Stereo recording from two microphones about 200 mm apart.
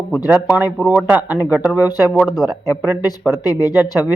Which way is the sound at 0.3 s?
10° right (ahead or behind).